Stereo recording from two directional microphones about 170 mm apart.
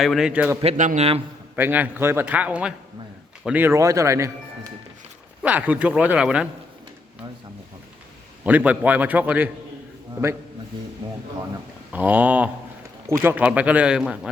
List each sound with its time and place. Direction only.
0.0 s a man's voice: centre (ahead or behind)
0.6 s a man's voice: 35° right (ahead or behind)
1.5 s a man's voice: 10° right (ahead or behind)
5.4 s a man's voice: 10° right (ahead or behind)
8.4 s a man's voice: 10° right (ahead or behind)
11.9 s a man's voice: 10° right (ahead or behind)